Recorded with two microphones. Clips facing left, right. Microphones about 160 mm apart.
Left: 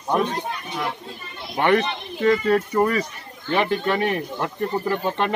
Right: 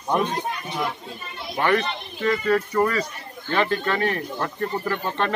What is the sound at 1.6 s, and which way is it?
A man's voice, 25° left (ahead or behind).